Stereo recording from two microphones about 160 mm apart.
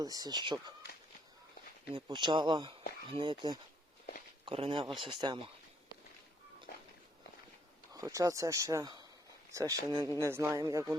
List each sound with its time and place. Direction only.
0.0 s speech: 25° right (ahead or behind)
1.9 s speech: 30° right (ahead or behind)
7.9 s speech: 20° right (ahead or behind)